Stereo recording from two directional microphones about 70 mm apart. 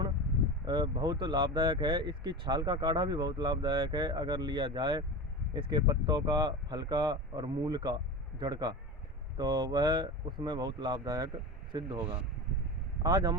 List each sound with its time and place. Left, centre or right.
0.6 s speech: right
13.0 s speech: right